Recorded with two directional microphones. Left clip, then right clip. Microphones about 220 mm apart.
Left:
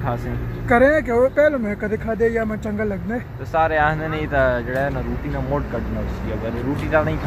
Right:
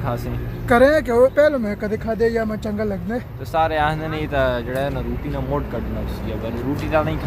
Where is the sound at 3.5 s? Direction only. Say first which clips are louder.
Left 1 dB; 5° left (ahead or behind).